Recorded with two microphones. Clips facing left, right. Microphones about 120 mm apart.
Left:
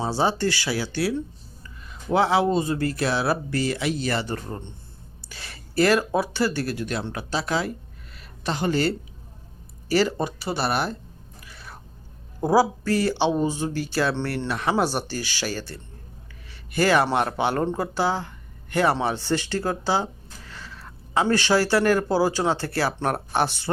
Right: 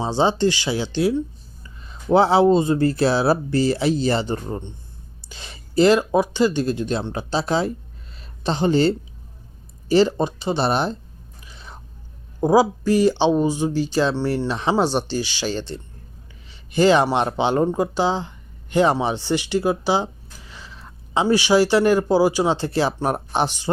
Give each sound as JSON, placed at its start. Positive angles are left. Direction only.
{"t": 0.0, "sound": "speech", "side_deg": -20}
{"t": 11.4, "sound": "biting", "side_deg": -20}
{"t": 12.4, "sound": "speech", "side_deg": -15}